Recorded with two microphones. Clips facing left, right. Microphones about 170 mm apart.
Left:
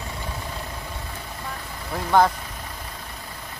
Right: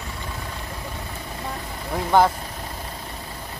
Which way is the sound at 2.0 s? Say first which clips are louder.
Right 1 dB; 10° right (ahead or behind).